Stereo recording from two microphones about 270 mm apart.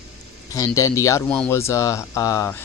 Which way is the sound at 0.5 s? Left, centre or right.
Centre.